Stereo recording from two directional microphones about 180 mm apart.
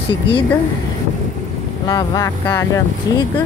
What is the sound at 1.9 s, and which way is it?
Speech, 20° left (ahead or behind).